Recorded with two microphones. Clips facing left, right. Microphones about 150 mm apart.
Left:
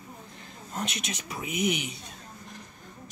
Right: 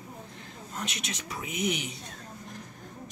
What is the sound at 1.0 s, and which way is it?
Speech, 15° left (ahead or behind).